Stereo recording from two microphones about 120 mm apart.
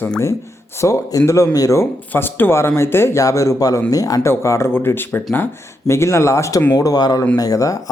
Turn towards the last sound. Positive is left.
turn(degrees=30)  # may be behind; listen again after turning